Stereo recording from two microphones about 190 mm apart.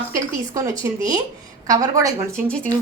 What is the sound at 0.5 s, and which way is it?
A woman's voice, 15° right (ahead or behind).